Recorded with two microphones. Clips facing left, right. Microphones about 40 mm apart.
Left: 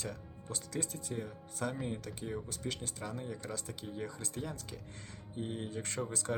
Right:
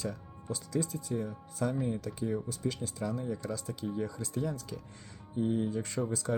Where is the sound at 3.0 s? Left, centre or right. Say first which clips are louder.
Right 10 dB; left.